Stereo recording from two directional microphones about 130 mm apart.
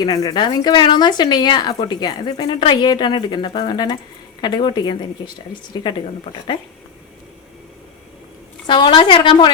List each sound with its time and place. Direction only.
0.0 s a woman's voice: 30° left (ahead or behind)
8.6 s a woman's voice: 35° left (ahead or behind)